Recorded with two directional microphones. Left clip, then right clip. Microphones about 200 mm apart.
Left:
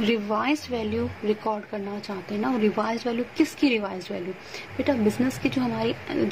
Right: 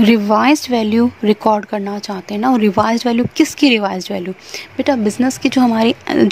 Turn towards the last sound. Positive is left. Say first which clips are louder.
# right 12 dB
turn(degrees=-55)  # may be behind; listen again after turning